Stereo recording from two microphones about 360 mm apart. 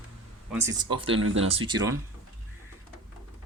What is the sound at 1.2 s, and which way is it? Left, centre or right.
Speech, right.